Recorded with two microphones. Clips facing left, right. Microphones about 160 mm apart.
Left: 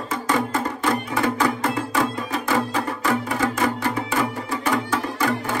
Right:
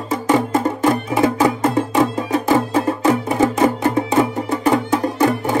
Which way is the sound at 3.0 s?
20° right (ahead or behind).